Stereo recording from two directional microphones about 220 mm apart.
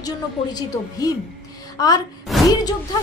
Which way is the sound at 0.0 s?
15° left (ahead or behind).